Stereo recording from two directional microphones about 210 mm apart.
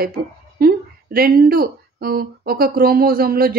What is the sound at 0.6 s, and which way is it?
Speech, 45° right (ahead or behind).